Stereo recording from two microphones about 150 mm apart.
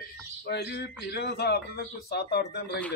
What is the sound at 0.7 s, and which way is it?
Speech, 90° left.